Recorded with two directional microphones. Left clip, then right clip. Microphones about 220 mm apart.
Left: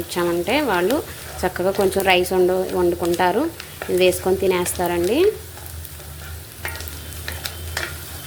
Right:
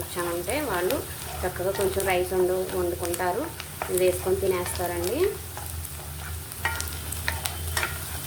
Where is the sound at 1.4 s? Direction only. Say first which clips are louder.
Left 8 dB; 45° left (ahead or behind).